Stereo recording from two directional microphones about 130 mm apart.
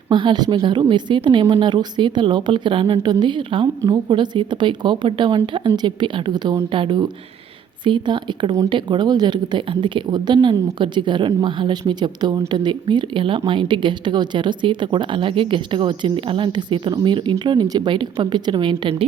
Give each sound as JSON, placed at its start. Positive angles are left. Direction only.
{"t": 0.1, "sound": "a woman's voice", "side_deg": -35}